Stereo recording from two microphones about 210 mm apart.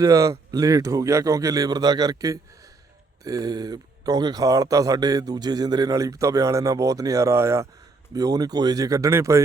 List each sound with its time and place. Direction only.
0.0 s speech: 15° right (ahead or behind)